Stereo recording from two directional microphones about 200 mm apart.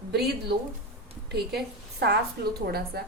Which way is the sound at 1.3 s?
55° right (ahead or behind).